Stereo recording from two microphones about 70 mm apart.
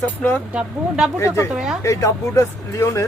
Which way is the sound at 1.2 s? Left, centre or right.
Left.